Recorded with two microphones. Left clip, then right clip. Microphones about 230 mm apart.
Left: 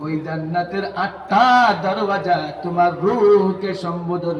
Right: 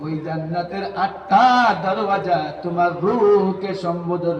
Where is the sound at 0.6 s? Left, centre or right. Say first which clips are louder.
Left 1 dB; left.